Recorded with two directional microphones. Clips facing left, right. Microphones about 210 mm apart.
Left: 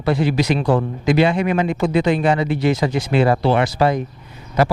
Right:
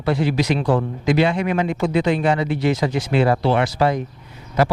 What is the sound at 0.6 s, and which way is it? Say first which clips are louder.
Speech: left 1 dB; 25° left (ahead or behind).